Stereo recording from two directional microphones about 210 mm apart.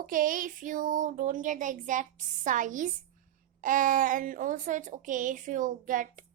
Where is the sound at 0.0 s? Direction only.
40° right (ahead or behind).